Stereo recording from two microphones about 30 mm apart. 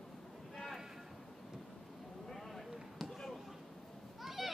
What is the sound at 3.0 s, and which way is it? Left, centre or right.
Basketball bounce, centre.